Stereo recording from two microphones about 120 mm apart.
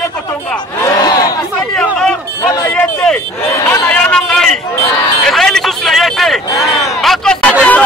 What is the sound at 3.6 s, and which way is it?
Chatter, 15° left (ahead or behind).